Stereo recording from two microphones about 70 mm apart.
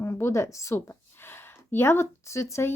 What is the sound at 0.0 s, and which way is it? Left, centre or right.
Speech, left.